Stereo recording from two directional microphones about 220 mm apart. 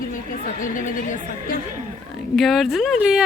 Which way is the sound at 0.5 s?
35° left (ahead or behind).